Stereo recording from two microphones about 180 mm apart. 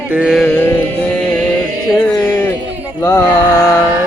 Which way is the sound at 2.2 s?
15° left (ahead or behind).